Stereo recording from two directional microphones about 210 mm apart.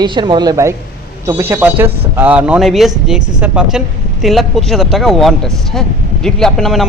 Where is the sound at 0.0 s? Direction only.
20° right (ahead or behind).